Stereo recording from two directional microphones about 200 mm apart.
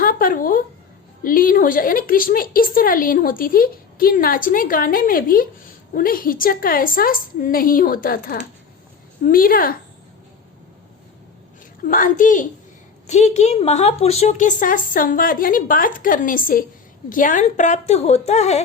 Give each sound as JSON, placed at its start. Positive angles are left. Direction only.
{"t": 0.0, "sound": "a woman's voice", "side_deg": 45}
{"t": 11.9, "sound": "a woman's voice", "side_deg": 45}